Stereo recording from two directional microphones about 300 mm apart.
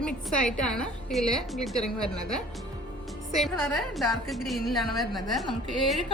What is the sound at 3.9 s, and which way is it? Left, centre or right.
A woman's voice, centre.